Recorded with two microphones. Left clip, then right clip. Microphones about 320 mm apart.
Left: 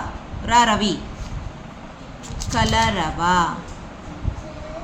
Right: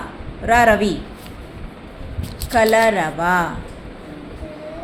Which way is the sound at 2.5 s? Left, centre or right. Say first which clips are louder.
Right 6 dB; left.